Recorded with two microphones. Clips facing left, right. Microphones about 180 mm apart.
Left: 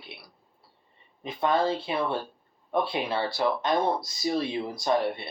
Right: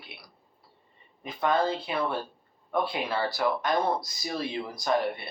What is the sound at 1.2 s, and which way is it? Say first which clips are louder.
Speech: left 1 dB; 25° left (ahead or behind).